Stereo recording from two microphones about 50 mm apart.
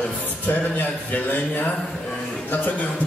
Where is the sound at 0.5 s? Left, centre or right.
Left.